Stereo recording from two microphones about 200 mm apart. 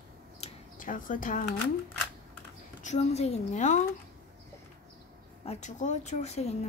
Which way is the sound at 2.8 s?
35° left (ahead or behind).